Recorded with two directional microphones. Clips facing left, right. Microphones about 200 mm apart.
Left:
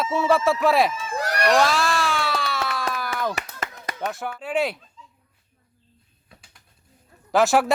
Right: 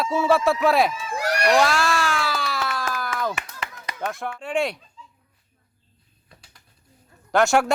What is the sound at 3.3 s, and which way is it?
Clapping, 45° left (ahead or behind).